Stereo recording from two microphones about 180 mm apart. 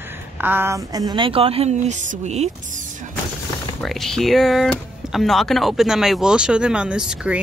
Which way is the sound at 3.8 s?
Centre (ahead or behind).